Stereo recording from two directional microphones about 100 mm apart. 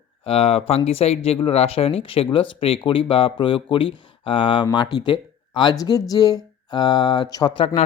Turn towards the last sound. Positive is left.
turn(degrees=40)  # may be behind; listen again after turning